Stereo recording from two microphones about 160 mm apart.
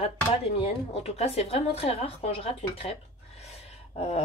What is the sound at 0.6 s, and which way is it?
A woman's voice, 35° left (ahead or behind).